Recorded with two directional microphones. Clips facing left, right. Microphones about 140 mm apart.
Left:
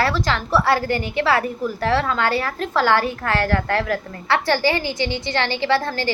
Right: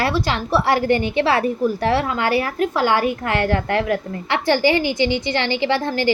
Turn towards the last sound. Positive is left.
turn(degrees=-15)  # may be behind; listen again after turning